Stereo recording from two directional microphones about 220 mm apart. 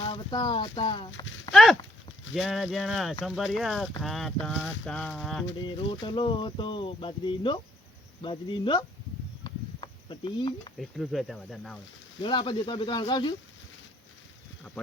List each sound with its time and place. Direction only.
0.0 s speech: 20° left (ahead or behind)
1.5 s horse: 20° left (ahead or behind)
2.3 s speech: centre (ahead or behind)
5.6 s speech: 20° left (ahead or behind)
9.4 s a sound: 20° left (ahead or behind)
10.8 s speech: centre (ahead or behind)
12.2 s speech: 20° left (ahead or behind)